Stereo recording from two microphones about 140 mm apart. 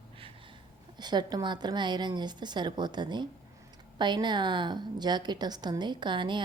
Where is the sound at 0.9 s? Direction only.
30° right (ahead or behind).